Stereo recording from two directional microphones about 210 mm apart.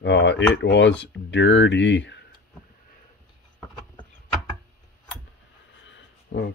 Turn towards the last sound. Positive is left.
turn(degrees=55)  # may be behind; listen again after turning